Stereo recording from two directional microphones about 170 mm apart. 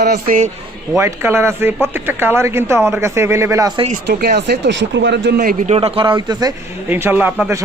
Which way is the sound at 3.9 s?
65° right (ahead or behind).